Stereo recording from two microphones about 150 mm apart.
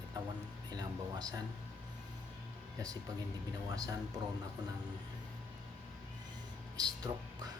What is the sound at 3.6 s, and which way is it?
Speech, 25° right (ahead or behind).